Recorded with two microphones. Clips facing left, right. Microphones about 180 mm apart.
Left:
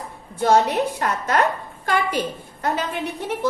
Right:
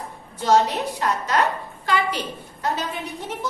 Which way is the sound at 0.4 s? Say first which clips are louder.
Left 2 dB; 55° left (ahead or behind).